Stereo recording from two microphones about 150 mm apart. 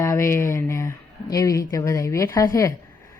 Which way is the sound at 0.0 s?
20° left (ahead or behind).